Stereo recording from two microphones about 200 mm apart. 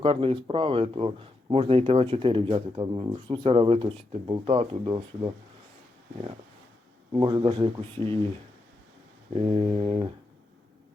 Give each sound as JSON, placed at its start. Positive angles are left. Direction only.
{"t": 0.0, "sound": "speech", "side_deg": -25}
{"t": 7.1, "sound": "speech", "side_deg": -20}
{"t": 9.7, "sound": "speech", "side_deg": -25}